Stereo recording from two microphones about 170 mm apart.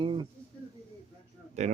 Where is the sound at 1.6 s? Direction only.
45° right (ahead or behind).